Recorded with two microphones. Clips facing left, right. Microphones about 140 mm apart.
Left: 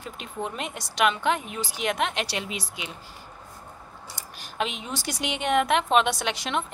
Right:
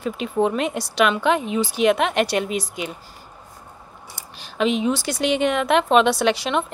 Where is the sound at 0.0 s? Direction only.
85° right.